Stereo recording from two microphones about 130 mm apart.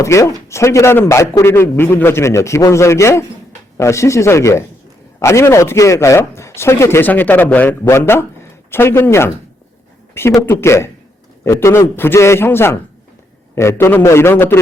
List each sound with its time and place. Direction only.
0.0 s a man's voice: 25° left (ahead or behind)